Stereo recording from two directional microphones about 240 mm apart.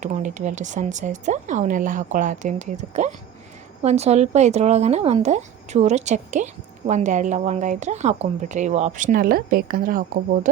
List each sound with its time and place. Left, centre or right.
0.0 s speech: right